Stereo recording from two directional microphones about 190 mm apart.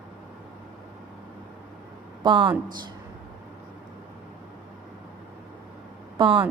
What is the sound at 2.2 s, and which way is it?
Speech, 25° right (ahead or behind).